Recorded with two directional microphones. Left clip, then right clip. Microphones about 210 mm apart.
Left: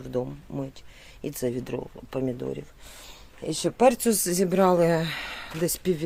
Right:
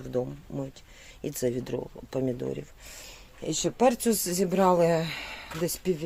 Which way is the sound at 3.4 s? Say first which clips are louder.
Left 3 dB; 10° left (ahead or behind).